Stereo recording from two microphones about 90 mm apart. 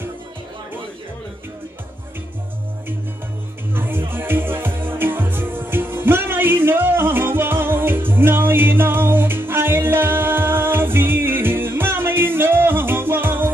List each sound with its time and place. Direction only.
3.7 s music: 25° right (ahead or behind)